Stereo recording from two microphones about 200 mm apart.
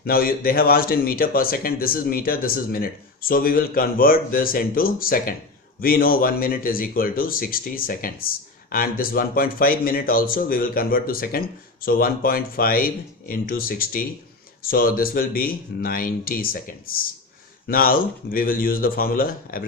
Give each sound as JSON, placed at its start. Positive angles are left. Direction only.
{"t": 0.0, "sound": "speech", "side_deg": 45}